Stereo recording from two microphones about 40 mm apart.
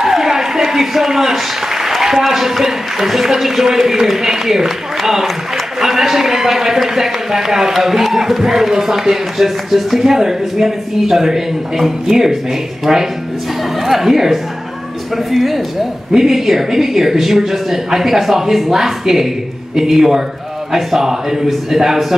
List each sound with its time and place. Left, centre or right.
0.0 s a man's voice: centre